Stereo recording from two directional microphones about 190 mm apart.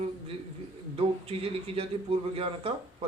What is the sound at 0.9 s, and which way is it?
A man's voice, 30° right (ahead or behind).